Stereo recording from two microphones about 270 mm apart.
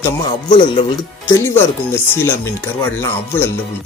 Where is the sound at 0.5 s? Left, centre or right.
Centre.